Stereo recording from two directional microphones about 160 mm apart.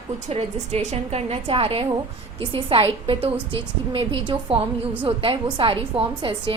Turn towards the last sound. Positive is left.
turn(degrees=-30)  # may be behind; listen again after turning